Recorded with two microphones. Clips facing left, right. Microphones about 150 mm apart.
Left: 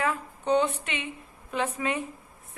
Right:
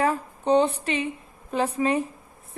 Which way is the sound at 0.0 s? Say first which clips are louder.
Right 5 dB; 35° right (ahead or behind).